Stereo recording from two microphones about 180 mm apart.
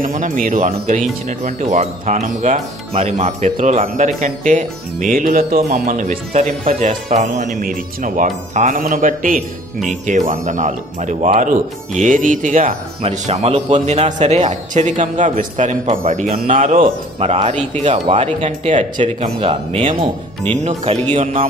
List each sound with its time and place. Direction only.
0.0 s speech: 50° right (ahead or behind)
16.7 s speech: 35° right (ahead or behind)
19.4 s speech: 30° right (ahead or behind)